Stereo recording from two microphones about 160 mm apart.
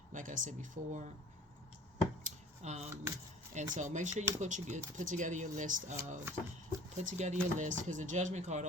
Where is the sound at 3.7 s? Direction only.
50° right (ahead or behind).